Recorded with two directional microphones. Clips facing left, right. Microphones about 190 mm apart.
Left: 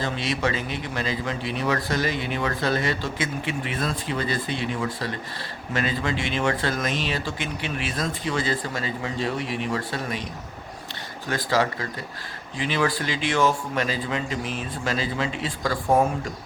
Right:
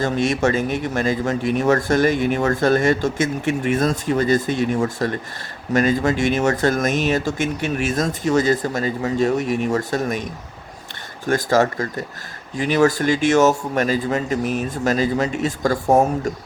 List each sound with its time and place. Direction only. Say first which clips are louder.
0.0 s a man's voice: right 7 dB; 45° right (ahead or behind)
11.3 s a man's voice: right 6 dB; 45° right (ahead or behind)